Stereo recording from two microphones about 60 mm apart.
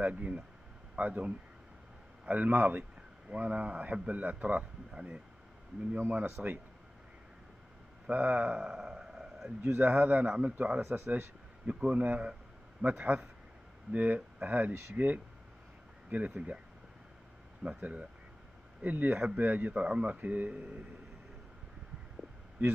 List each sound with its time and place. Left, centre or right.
0.0 s speech: right
5.9 s speech: right
8.1 s speech: right; by 9.5 s centre
9.6 s a man's voice: right
9.8 s speech: right
17.6 s speech: centre